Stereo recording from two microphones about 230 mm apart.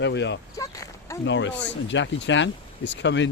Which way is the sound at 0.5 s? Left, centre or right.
Centre.